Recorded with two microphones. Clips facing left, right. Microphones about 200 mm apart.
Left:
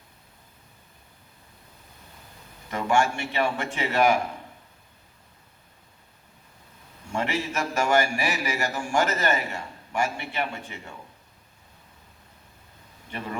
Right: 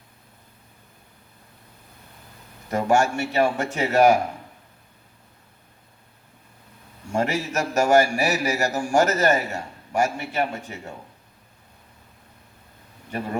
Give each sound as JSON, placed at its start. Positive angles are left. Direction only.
{"t": 2.6, "sound": "a man's voice", "side_deg": -40}
{"t": 7.1, "sound": "a man's voice", "side_deg": -40}